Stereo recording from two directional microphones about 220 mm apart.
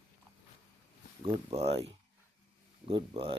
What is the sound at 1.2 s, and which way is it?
Speech, 25° right (ahead or behind).